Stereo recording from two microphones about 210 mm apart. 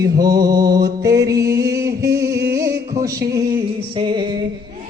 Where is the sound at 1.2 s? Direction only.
15° right (ahead or behind).